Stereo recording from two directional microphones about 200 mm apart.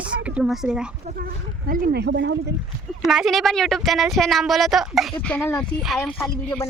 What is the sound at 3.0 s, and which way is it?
Speech, centre (ahead or behind).